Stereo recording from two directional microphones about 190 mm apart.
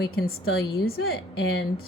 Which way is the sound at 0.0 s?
60° left (ahead or behind).